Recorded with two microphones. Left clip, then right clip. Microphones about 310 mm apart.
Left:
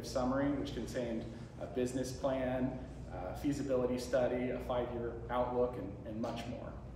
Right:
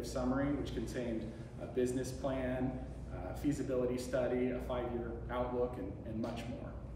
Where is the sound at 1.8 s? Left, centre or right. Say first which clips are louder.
Right 1 dB; centre.